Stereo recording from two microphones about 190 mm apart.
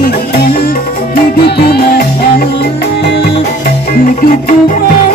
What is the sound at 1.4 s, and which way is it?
Music, 60° left (ahead or behind).